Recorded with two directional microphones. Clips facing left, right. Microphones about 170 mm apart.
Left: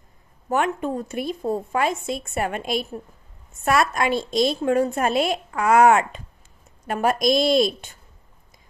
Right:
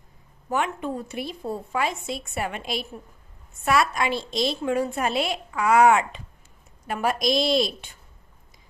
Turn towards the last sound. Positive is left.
turn(degrees=50)  # may be behind; listen again after turning